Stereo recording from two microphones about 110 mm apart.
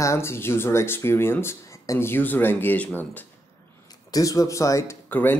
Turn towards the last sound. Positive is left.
turn(degrees=15)  # may be behind; listen again after turning